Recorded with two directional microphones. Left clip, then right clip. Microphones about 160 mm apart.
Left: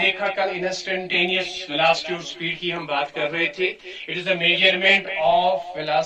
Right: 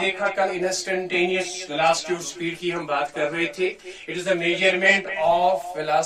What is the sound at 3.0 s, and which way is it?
A man's voice, 20° right (ahead or behind).